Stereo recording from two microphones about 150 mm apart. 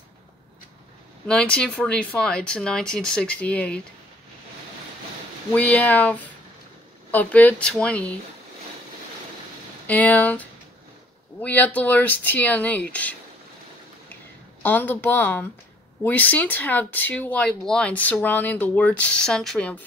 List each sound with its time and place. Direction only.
1.2 s speech: 5° left (ahead or behind)
5.5 s speech: 10° left (ahead or behind)
9.8 s speech: 10° left (ahead or behind)
14.6 s speech: 15° left (ahead or behind)